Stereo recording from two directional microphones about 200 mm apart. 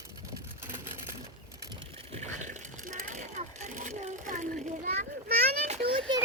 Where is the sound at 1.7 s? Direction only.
30° right (ahead or behind).